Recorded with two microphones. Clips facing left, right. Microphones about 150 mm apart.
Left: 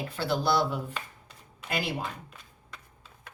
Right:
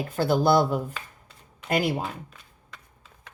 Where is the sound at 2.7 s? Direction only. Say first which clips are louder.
Even; centre (ahead or behind).